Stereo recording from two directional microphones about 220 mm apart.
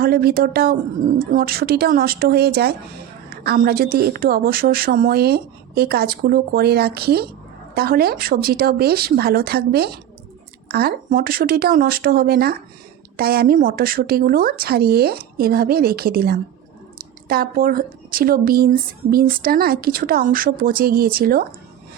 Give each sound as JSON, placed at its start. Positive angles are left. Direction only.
{"t": 0.0, "sound": "a woman's voice", "side_deg": -45}